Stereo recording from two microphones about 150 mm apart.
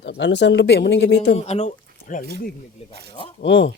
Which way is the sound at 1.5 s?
50° left (ahead or behind).